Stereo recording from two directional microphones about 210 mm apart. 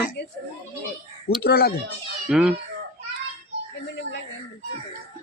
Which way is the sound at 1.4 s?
50° left (ahead or behind).